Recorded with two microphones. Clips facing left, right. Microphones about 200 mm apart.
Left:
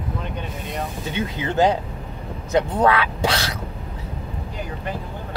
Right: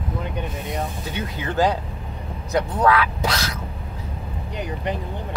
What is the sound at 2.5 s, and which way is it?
Speech, 25° left (ahead or behind).